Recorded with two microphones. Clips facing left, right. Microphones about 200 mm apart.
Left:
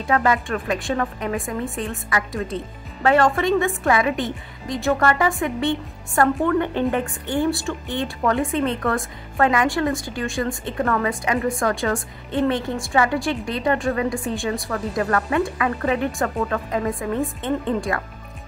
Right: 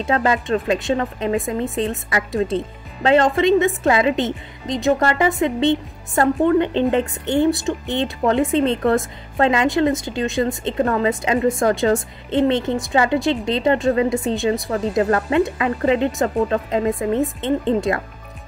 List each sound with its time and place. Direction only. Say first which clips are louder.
0.0 s a woman's voice: right 1 dB; 25° right (ahead or behind)